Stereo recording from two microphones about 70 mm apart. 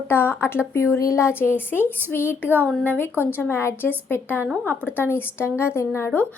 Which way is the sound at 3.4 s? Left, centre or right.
Left.